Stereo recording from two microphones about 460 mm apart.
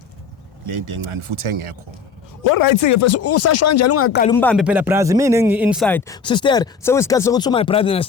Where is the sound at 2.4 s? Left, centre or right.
Left.